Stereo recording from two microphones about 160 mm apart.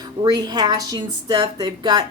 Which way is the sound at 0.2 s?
25° right (ahead or behind).